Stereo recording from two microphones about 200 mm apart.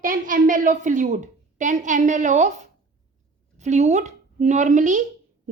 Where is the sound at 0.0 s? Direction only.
45° right (ahead or behind).